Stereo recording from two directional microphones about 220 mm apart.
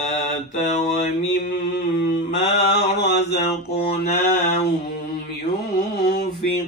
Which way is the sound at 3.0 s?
50° left (ahead or behind).